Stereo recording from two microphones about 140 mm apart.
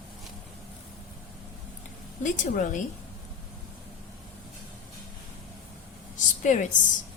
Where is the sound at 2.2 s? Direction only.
65° left (ahead or behind).